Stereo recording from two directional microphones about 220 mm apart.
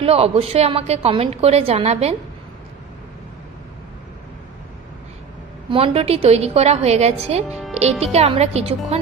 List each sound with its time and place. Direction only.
0.0 s a woman's voice: 25° right (ahead or behind)
5.7 s a woman's voice: 25° right (ahead or behind)